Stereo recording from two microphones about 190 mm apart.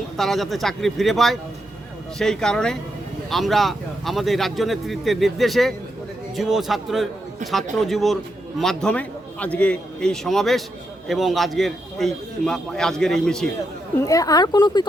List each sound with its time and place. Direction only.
0.2 s a man's voice: centre (ahead or behind)
14.0 s speech: 15° left (ahead or behind)